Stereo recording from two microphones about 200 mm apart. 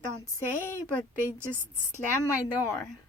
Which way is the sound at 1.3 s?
10° right (ahead or behind).